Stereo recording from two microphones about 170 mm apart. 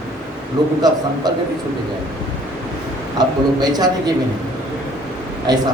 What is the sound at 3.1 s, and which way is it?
Speech, 25° right (ahead or behind).